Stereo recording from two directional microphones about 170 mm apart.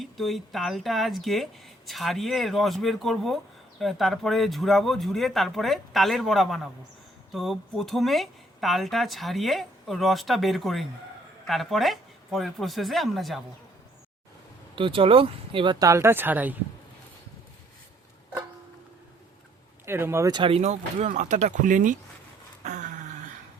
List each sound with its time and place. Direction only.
0.0 s speech: centre (ahead or behind)
14.8 s speech: 30° right (ahead or behind); by 16.6 s 10° right (ahead or behind)
19.8 s speech: 15° right (ahead or behind)
20.6 s speech: 45° right (ahead or behind)
22.6 s dog: 45° right (ahead or behind)